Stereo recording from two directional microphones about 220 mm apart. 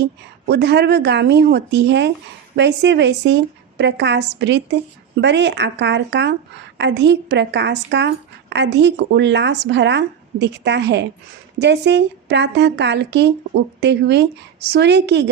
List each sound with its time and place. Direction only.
0.0 s speech: 50° right (ahead or behind)